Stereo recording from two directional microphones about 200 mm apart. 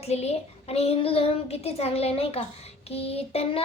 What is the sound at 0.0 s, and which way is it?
Child singing, 30° left (ahead or behind).